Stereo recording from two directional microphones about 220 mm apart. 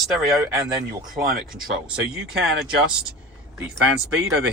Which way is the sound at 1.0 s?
40° right (ahead or behind).